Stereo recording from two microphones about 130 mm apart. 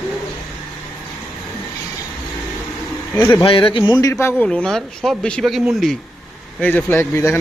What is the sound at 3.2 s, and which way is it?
Speech, 20° left (ahead or behind).